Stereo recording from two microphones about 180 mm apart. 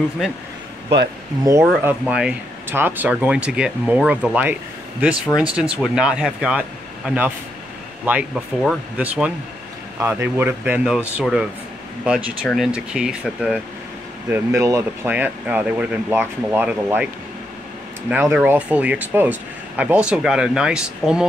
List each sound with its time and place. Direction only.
1.4 s speech: 15° right (ahead or behind)
14.3 s speech: 15° right (ahead or behind)
18.1 s speech: 10° right (ahead or behind)